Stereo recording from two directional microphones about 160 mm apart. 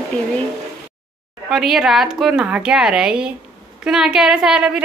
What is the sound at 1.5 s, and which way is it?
A woman's voice, centre (ahead or behind).